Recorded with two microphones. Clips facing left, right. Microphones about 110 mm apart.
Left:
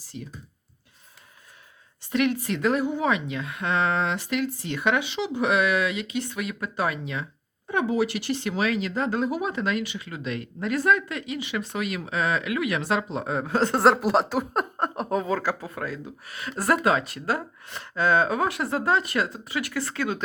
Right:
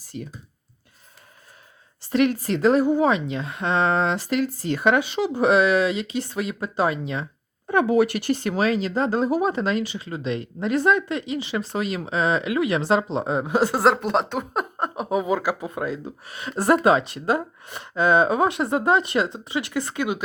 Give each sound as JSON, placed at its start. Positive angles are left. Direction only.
{"t": 0.0, "sound": "clicking", "side_deg": -50}
{"t": 2.0, "sound": "speech", "side_deg": -35}
{"t": 7.7, "sound": "speech", "side_deg": -55}